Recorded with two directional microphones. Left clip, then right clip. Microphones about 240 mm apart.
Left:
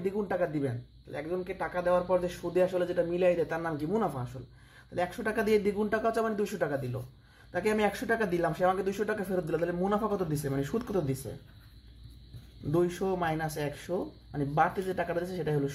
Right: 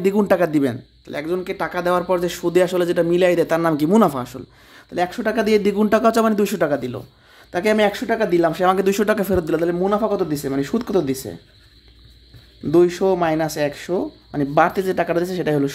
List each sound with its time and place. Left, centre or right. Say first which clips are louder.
0.0 s speech: right 14 dB; right
4.9 s speech: right 11 dB; right
12.7 s speech: right 14 dB; right